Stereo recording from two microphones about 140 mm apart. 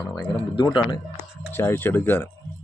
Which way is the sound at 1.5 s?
15° left (ahead or behind).